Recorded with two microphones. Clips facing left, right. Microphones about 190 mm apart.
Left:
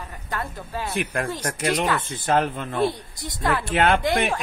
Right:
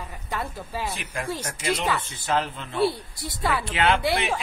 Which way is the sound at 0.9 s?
60° left (ahead or behind).